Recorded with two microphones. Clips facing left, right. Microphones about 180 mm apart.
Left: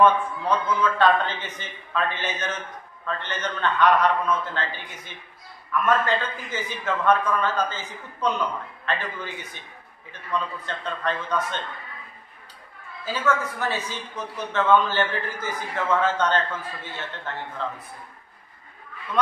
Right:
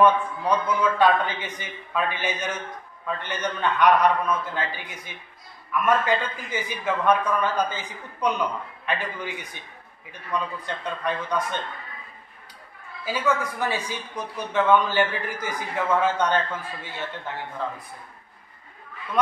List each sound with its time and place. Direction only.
0.0 s a man's voice: 10° right (ahead or behind)
10.6 s a man's voice: 10° right (ahead or behind)
13.0 s a man's voice: 10° right (ahead or behind)